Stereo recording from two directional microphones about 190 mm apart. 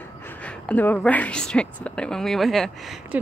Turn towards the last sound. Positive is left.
turn(degrees=0)  # may be behind; listen again after turning